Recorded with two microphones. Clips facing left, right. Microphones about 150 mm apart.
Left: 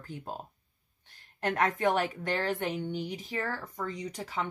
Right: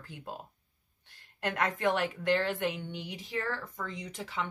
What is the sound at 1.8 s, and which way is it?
Speech, 40° left (ahead or behind).